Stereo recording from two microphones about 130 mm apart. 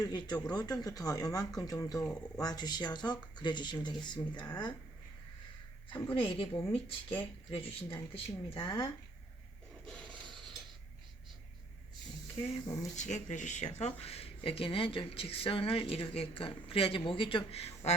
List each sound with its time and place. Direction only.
0.0 s speech: 30° left (ahead or behind)
5.9 s speech: 40° left (ahead or behind)
9.8 s rub: 10° left (ahead or behind)
13.0 s speech: 65° left (ahead or behind)